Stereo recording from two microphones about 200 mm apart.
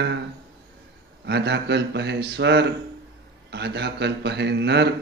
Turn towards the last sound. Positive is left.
turn(degrees=-60)  # may be behind; listen again after turning